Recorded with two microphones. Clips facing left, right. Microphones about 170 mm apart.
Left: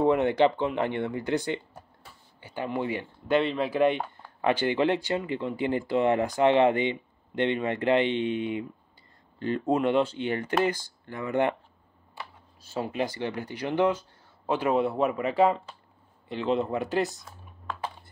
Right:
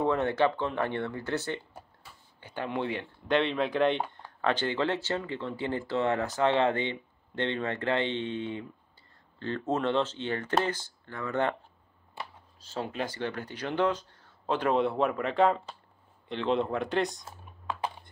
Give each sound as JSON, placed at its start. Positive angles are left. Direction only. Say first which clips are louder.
{"t": 0.0, "sound": "speech", "louder": "left 4 dB", "side_deg": 15}
{"t": 12.6, "sound": "speech", "louder": "left 4 dB", "side_deg": 10}